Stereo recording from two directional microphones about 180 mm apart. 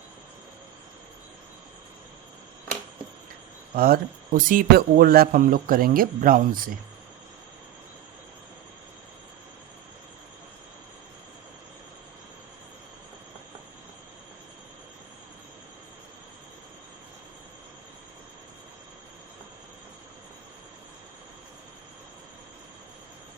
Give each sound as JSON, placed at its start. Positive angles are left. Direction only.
{"t": 3.8, "sound": "speech", "side_deg": -55}